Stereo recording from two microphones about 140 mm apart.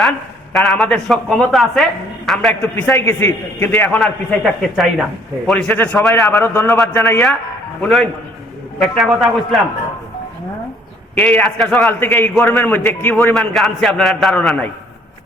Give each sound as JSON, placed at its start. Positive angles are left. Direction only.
{"t": 0.5, "sound": "a man's voice", "side_deg": 0}
{"t": 2.6, "sound": "a man's voice", "side_deg": 15}
{"t": 7.8, "sound": "a man's voice", "side_deg": 5}
{"t": 11.1, "sound": "a man's voice", "side_deg": 10}
{"t": 13.3, "sound": "a man's voice", "side_deg": 0}